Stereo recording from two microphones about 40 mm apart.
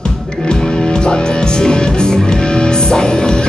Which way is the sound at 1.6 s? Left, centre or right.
Centre.